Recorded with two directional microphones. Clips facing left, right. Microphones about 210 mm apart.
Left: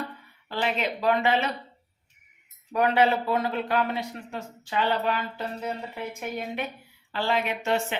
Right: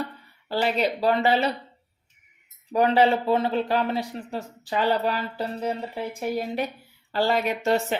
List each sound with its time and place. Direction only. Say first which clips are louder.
0.4 s a man's voice: right 4 dB; 35° right (ahead or behind)
2.7 s a man's voice: right 3 dB; 30° right (ahead or behind)